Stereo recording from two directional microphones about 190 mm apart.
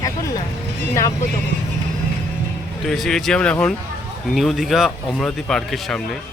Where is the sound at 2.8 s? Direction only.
Centre (ahead or behind).